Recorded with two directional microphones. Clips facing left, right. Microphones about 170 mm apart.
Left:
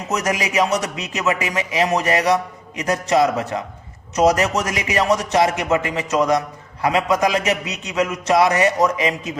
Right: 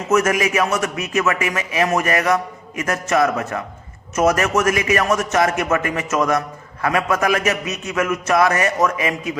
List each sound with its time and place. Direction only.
0.1 s a man's voice: 20° left (ahead or behind)